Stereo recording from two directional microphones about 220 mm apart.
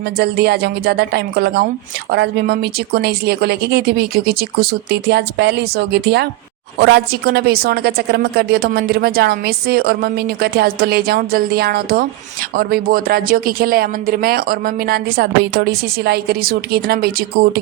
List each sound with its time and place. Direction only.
0.2 s a woman's voice: 45° right (ahead or behind)